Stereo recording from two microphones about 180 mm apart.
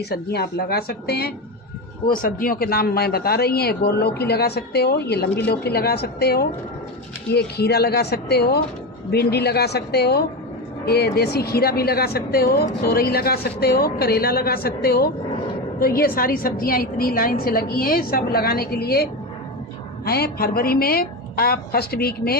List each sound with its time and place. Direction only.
0.1 s a woman's voice: 60° left (ahead or behind)
20.1 s a woman's voice: 60° left (ahead or behind)